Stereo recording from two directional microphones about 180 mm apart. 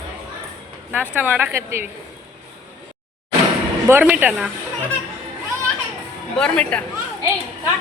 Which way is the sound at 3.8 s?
10° right (ahead or behind).